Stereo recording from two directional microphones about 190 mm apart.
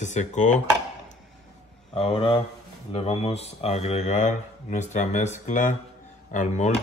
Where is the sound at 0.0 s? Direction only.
40° left (ahead or behind).